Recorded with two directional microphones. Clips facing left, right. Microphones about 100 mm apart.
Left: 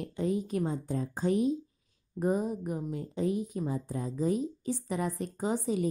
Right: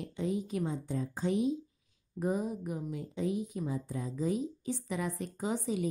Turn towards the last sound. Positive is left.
turn(degrees=40)  # may be behind; listen again after turning